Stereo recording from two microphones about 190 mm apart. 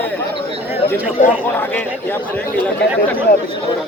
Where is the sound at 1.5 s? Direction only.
10° left (ahead or behind).